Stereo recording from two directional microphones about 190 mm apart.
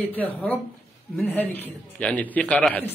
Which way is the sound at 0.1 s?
10° left (ahead or behind).